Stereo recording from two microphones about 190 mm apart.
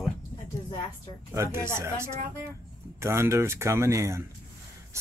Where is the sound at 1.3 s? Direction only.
15° right (ahead or behind).